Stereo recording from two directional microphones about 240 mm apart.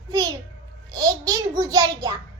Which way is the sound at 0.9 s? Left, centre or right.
Centre.